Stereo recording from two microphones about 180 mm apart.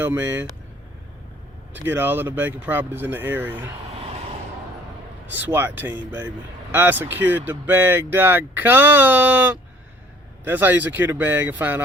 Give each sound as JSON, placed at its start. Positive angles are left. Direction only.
{"t": 0.0, "sound": "speech", "side_deg": -10}
{"t": 1.7, "sound": "speech", "side_deg": -10}
{"t": 3.9, "sound": "vehicle", "side_deg": -35}
{"t": 5.3, "sound": "speech", "side_deg": -10}